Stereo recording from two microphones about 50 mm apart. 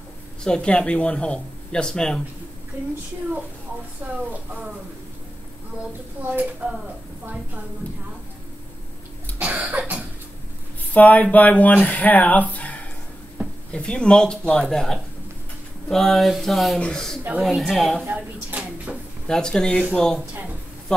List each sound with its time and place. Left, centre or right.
0.4 s speech: centre
2.7 s speech: right
4.1 s speech: right
6.2 s speech: right
7.8 s speech: left
9.4 s cough: right
9.8 s cough: right
10.9 s speech: left; by 18.0 s centre
18.1 s speech: right
19.2 s speech: centre